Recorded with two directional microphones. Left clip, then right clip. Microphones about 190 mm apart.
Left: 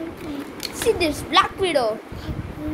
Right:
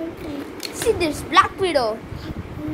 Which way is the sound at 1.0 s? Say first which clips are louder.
Right 3 dB; 10° left (ahead or behind).